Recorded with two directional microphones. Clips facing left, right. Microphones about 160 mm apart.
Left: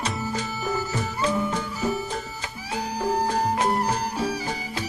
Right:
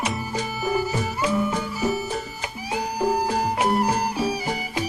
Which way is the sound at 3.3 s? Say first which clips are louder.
Right 1 dB; 10° right (ahead or behind).